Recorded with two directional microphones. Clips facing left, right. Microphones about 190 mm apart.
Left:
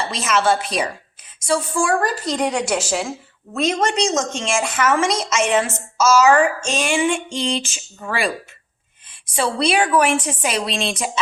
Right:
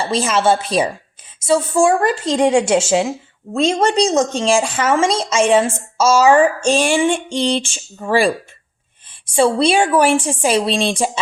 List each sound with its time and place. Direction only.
0.0 s a woman's voice: 30° right (ahead or behind)
9.3 s a woman's voice: 30° right (ahead or behind)